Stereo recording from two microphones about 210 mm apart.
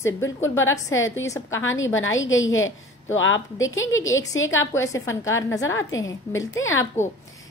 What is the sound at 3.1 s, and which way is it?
A woman's voice, 65° left (ahead or behind).